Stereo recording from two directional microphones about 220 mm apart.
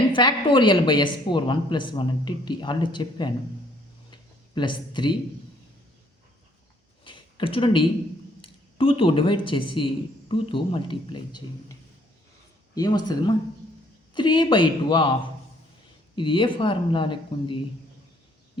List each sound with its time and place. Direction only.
0.1 s a woman's voice: 20° left (ahead or behind)
4.1 s a sound: 20° left (ahead or behind)
7.0 s a sound: 20° left (ahead or behind)
8.4 s a woman's voice: 25° left (ahead or behind)
12.7 s a woman's voice: 20° left (ahead or behind)
16.1 s a woman's voice: 20° left (ahead or behind)